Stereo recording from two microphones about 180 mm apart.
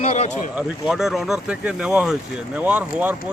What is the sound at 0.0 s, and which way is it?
Speech, 35° left (ahead or behind).